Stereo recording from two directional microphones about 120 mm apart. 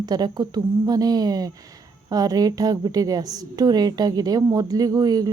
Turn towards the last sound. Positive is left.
turn(degrees=-35)  # may be behind; listen again after turning